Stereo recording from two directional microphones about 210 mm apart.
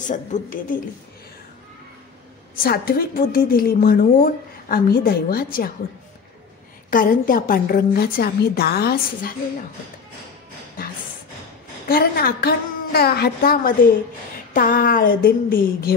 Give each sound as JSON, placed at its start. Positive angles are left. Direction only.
{"t": 0.0, "sound": "a woman's voice", "side_deg": 35}
{"t": 2.5, "sound": "a woman's voice", "side_deg": 45}
{"t": 6.9, "sound": "a woman's voice", "side_deg": 40}
{"t": 11.9, "sound": "a woman's voice", "side_deg": 45}